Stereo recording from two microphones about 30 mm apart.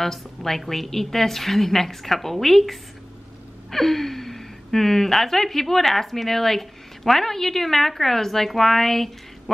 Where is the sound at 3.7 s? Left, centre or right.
Centre.